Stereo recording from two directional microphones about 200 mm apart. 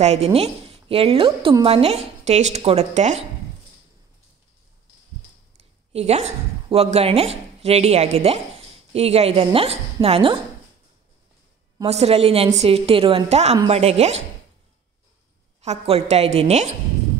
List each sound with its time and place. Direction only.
0.0 s a woman's voice: 30° right (ahead or behind)
5.9 s a woman's voice: 30° right (ahead or behind)
11.8 s a woman's voice: 30° right (ahead or behind)
15.6 s a woman's voice: 30° right (ahead or behind)